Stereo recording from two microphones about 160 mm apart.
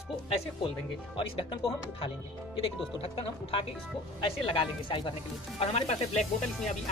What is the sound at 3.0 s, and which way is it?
Speech, 35° left (ahead or behind).